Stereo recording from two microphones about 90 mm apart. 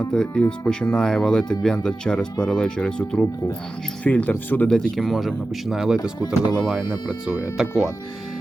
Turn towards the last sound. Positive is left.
turn(degrees=-10)  # may be behind; listen again after turning